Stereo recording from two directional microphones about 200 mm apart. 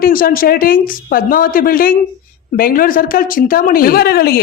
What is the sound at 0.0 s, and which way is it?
A woman's voice, 45° left (ahead or behind).